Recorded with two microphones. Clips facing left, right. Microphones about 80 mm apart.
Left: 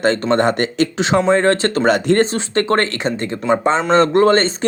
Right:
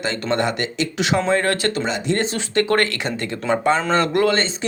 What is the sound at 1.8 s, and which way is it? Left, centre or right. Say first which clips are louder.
Speech: left 8 dB; left.